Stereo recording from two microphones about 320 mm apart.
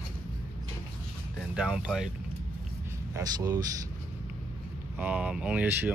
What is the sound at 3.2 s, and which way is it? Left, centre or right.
Speech, centre.